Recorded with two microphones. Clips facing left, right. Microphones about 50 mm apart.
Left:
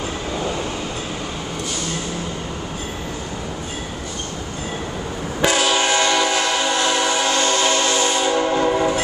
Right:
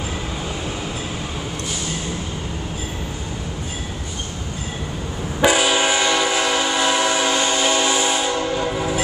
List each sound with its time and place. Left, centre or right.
5.4 s train: centre
8.3 s train: left
8.7 s train: centre